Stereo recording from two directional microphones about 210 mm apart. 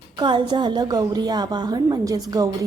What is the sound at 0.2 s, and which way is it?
A woman's voice, 20° right (ahead or behind).